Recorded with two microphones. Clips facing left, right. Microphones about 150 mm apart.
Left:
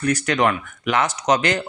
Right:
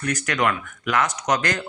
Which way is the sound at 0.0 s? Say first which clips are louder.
Left 4 dB; 30° left (ahead or behind).